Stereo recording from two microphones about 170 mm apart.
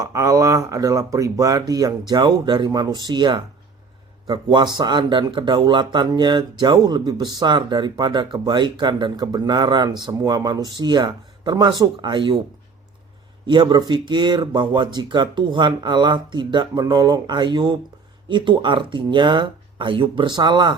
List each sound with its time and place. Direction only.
0.0 s speech: 20° right (ahead or behind)
13.5 s speech: 30° right (ahead or behind)